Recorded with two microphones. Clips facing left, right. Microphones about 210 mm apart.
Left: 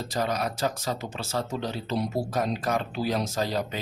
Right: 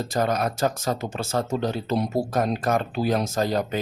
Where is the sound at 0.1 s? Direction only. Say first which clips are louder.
Right 4 dB; 50° right (ahead or behind).